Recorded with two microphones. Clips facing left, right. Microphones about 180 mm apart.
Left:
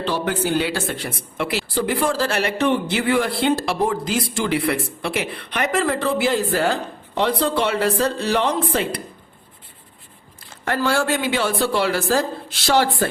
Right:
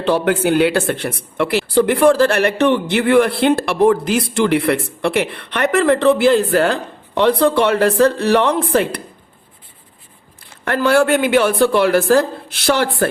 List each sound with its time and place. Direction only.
0.0 s speech: 60° right (ahead or behind)
10.7 s speech: 60° right (ahead or behind)